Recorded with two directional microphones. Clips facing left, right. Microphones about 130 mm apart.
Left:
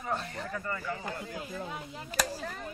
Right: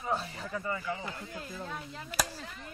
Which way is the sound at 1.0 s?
50° left (ahead or behind).